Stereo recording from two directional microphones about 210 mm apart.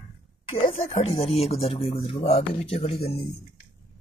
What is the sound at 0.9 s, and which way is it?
Speech, 30° left (ahead or behind).